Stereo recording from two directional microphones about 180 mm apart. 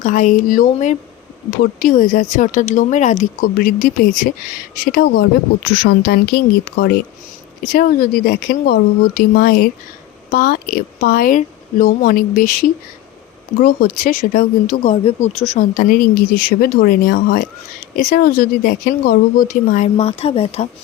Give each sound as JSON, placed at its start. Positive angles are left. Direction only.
{"t": 0.0, "sound": "speech", "side_deg": 45}